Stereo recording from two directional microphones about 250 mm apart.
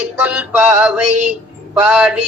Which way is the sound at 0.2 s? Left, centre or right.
Centre.